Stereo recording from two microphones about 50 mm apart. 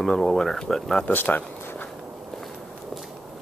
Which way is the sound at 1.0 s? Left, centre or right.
Left.